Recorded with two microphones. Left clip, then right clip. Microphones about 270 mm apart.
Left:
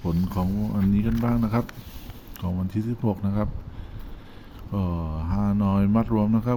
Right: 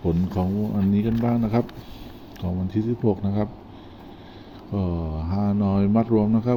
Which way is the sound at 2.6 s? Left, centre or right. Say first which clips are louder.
Right 6 dB; left.